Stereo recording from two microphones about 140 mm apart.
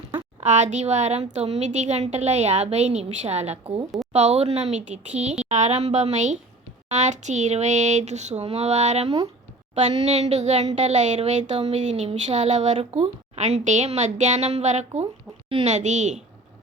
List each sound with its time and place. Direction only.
0.4 s a woman's voice: 60° right (ahead or behind)